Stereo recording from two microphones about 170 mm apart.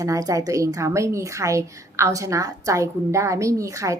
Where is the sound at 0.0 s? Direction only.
20° right (ahead or behind).